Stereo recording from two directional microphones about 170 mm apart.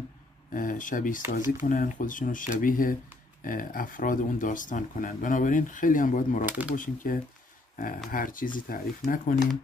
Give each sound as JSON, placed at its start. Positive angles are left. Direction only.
{"t": 0.5, "sound": "speech", "side_deg": 50}
{"t": 6.4, "sound": "speech", "side_deg": -10}
{"t": 6.7, "sound": "speech", "side_deg": 50}